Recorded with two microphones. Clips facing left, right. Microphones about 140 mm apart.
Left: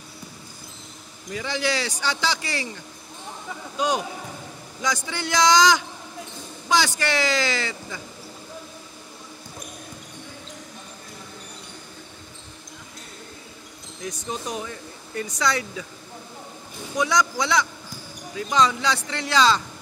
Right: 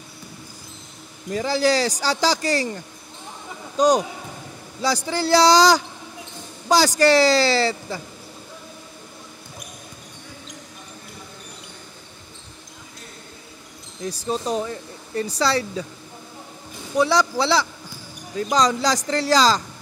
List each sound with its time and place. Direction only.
1.3 s speech: 40° right (ahead or behind)
14.0 s speech: 30° right (ahead or behind)
16.9 s speech: 30° right (ahead or behind)